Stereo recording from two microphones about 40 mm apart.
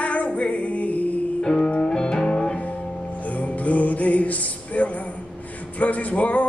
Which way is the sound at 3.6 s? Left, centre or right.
Left.